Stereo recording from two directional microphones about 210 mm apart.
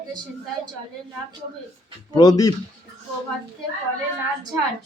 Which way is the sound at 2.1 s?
20° left (ahead or behind).